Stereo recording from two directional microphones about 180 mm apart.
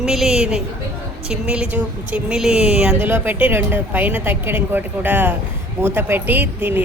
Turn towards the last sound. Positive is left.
turn(degrees=-10)  # may be behind; listen again after turning